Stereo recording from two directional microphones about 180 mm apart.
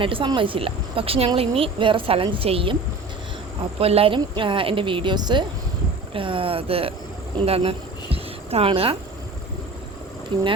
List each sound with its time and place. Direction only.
0.0 s speech: 30° right (ahead or behind)
3.8 s speech: 30° right (ahead or behind)
10.3 s speech: 25° right (ahead or behind)